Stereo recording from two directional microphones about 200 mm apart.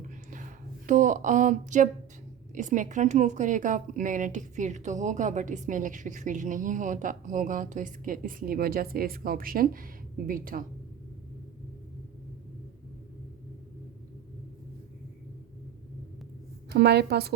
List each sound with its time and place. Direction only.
0.9 s a woman's voice: 40° right (ahead or behind)
16.7 s a woman's voice: 55° right (ahead or behind)